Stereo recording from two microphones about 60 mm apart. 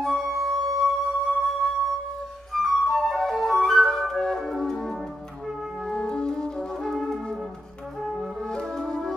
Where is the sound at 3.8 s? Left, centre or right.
Centre.